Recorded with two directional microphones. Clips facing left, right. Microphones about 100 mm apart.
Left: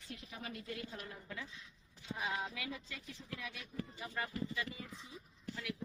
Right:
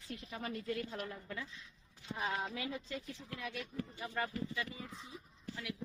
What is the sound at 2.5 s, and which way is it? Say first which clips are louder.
Speech: right 5 dB; 35° right (ahead or behind).